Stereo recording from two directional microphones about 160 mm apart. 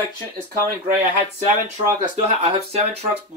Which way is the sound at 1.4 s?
45° right (ahead or behind).